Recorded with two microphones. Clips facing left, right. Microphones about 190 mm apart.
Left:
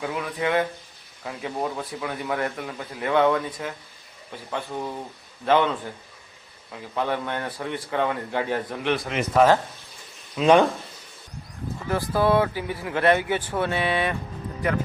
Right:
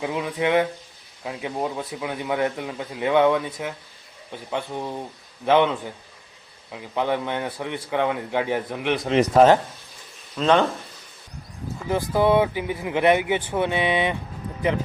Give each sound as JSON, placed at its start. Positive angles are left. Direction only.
{"t": 0.0, "sound": "speech", "side_deg": -15}
{"t": 9.0, "sound": "speech", "side_deg": -30}
{"t": 10.3, "sound": "speech", "side_deg": 10}
{"t": 11.9, "sound": "speech", "side_deg": -20}